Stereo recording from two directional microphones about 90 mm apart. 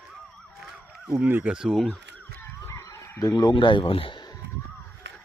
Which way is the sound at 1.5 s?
5° right (ahead or behind).